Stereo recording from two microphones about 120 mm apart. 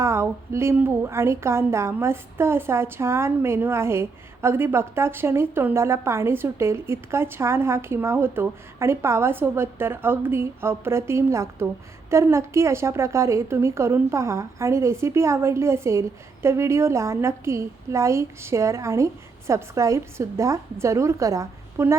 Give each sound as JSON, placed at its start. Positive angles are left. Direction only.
{"t": 0.0, "sound": "a woman's voice", "side_deg": -25}